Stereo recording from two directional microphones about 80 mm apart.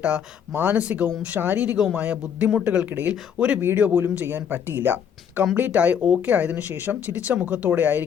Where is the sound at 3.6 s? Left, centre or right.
Right.